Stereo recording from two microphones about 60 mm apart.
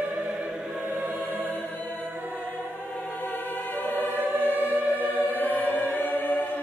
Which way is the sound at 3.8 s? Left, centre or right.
Left.